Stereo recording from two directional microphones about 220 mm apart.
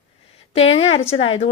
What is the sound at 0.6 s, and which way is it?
Speech, 25° left (ahead or behind).